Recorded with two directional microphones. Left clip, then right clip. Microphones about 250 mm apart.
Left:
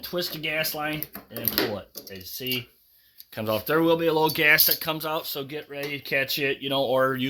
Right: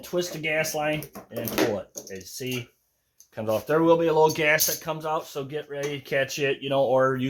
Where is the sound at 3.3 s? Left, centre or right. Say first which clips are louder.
Even; left.